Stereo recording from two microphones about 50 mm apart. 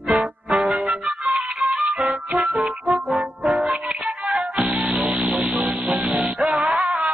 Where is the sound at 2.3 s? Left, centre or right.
Centre.